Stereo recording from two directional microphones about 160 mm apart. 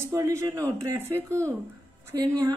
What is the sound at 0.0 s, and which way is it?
Speech, 15° right (ahead or behind).